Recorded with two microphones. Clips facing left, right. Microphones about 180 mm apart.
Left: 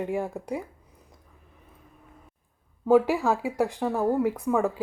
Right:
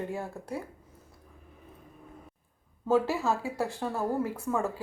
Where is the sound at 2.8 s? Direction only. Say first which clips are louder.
Left 6 dB; 15° left (ahead or behind).